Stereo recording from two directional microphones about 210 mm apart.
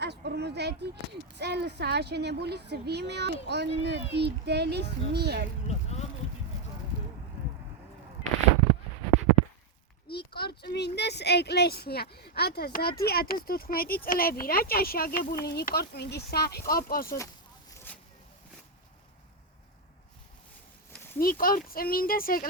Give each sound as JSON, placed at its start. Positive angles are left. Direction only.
{"t": 0.0, "sound": "speech", "side_deg": -50}
{"t": 5.6, "sound": "vehicle", "side_deg": 30}
{"t": 10.1, "sound": "speech", "side_deg": 50}
{"t": 17.7, "sound": "a sound", "side_deg": 10}
{"t": 20.9, "sound": "a sound", "side_deg": 10}
{"t": 21.2, "sound": "speech", "side_deg": 45}